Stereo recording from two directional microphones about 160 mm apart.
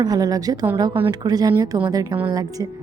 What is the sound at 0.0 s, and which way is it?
A woman's voice, 25° right (ahead or behind).